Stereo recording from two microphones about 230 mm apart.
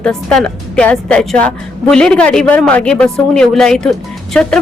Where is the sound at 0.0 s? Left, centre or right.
Centre.